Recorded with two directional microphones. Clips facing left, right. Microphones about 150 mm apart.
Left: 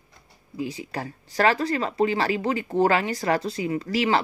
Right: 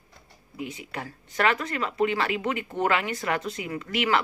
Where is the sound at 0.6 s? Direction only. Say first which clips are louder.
Left 5 dB; 30° left (ahead or behind).